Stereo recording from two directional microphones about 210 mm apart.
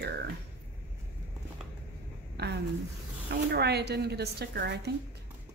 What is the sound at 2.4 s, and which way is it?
Speech, 50° right (ahead or behind).